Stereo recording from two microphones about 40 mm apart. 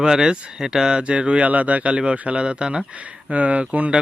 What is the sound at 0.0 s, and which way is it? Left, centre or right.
Speech, centre.